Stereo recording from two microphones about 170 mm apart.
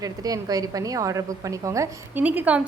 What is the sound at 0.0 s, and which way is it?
A woman's voice, 20° right (ahead or behind).